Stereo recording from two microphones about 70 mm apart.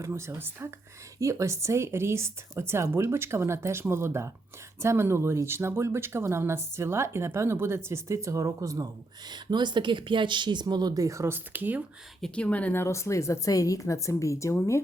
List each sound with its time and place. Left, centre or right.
0.0 s speech: right
1.2 s speech: right
9.2 s a woman's voice: right
11.3 s speech: right
12.3 s speech: centre
12.7 s a woman's voice: left